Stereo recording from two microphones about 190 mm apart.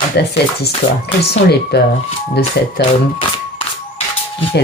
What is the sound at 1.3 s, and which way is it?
Speech, 55° left (ahead or behind).